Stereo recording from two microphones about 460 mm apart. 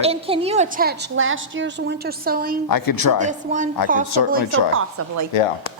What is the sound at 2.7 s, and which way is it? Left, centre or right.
Speech, left.